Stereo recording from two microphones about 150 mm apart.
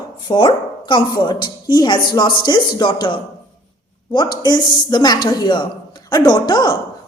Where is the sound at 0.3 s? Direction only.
30° left (ahead or behind).